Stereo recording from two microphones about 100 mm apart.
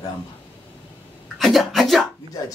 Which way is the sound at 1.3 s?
Centre (ahead or behind).